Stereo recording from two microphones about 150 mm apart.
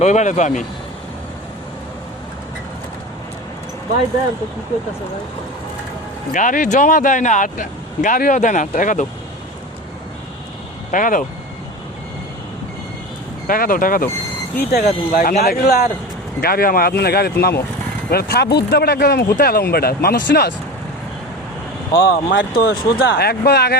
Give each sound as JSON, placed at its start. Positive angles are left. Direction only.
{"t": 0.0, "sound": "speech", "side_deg": 55}
{"t": 6.3, "sound": "speech", "side_deg": 60}
{"t": 10.9, "sound": "speech", "side_deg": 60}
{"t": 13.5, "sound": "speech", "side_deg": 70}
{"t": 14.7, "sound": "speech", "side_deg": 90}
{"t": 22.0, "sound": "speech", "side_deg": 90}